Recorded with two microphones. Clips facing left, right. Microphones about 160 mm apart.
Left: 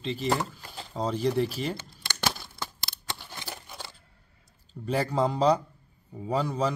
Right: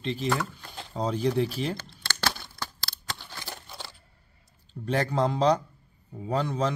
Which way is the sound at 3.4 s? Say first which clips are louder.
Even; 5° left (ahead or behind).